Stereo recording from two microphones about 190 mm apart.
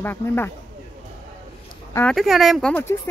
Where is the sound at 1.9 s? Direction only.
Centre (ahead or behind).